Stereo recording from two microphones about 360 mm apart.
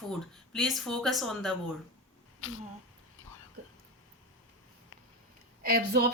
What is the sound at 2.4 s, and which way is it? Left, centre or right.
Speech, left.